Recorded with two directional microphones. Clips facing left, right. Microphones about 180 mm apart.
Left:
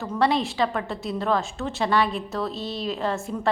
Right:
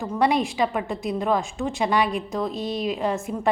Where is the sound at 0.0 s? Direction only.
15° right (ahead or behind).